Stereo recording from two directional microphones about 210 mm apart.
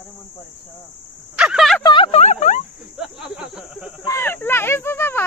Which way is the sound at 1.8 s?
25° left (ahead or behind).